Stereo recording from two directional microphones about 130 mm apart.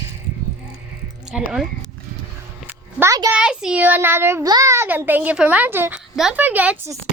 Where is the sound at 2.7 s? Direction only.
15° right (ahead or behind).